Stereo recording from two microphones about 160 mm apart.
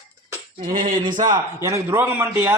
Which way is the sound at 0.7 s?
60° right (ahead or behind).